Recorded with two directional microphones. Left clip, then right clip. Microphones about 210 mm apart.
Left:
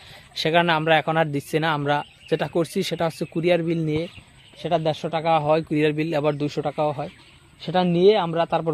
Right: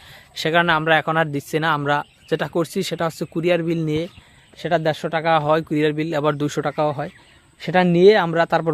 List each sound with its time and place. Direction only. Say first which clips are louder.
0.3 s speech: right 2 dB; 10° right (ahead or behind)
6.3 s speech: right 3 dB; 30° right (ahead or behind)